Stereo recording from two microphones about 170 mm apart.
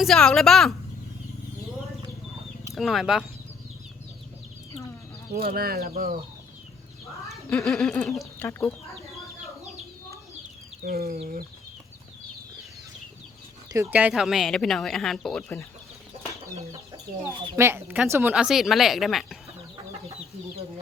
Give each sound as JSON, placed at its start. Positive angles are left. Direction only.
{"t": 0.0, "sound": "speech", "side_deg": 5}
{"t": 2.7, "sound": "speech", "side_deg": 0}
{"t": 5.3, "sound": "speech", "side_deg": -60}
{"t": 7.3, "sound": "speech", "side_deg": 0}
{"t": 10.8, "sound": "speech", "side_deg": -60}
{"t": 13.7, "sound": "speech", "side_deg": -15}
{"t": 17.2, "sound": "speech", "side_deg": -15}